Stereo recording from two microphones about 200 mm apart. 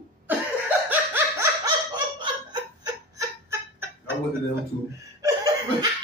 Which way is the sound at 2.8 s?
15° right (ahead or behind).